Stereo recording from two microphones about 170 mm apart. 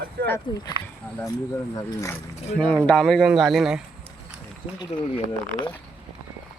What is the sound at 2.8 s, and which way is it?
Speech, centre (ahead or behind).